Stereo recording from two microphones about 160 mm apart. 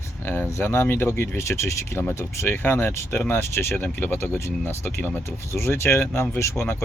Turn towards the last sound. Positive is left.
turn(degrees=15)  # may be behind; listen again after turning